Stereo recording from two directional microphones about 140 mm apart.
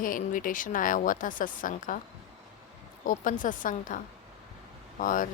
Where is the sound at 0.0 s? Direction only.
75° left (ahead or behind).